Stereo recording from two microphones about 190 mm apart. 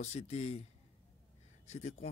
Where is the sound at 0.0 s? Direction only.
35° left (ahead or behind).